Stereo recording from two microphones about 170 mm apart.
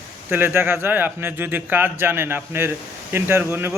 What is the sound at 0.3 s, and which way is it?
A man's voice, 10° right (ahead or behind).